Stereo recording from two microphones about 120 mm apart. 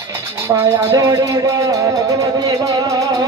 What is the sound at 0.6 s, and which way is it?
Speech, 30° right (ahead or behind).